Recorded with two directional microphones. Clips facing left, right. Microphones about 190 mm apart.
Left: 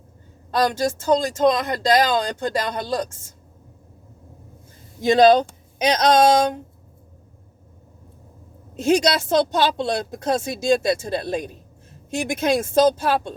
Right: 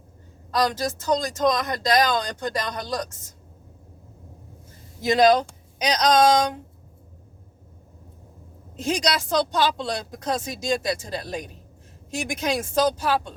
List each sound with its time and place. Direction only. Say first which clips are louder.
0.5 s speech: left 3 dB; 25° left (ahead or behind)
5.0 s speech: left 4 dB; 30° left (ahead or behind)
8.8 s speech: left 6 dB; 25° left (ahead or behind)